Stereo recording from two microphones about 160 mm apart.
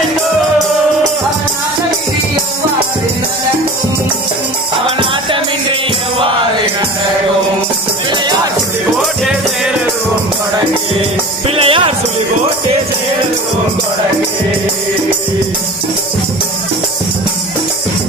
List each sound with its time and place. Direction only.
4.8 s music: 35° right (ahead or behind)
11.4 s music: 35° right (ahead or behind)